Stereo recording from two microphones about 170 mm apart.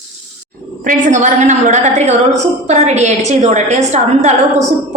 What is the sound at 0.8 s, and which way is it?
A woman's voice, 45° right (ahead or behind).